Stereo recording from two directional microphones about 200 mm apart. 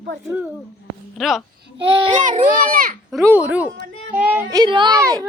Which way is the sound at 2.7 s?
45° right (ahead or behind).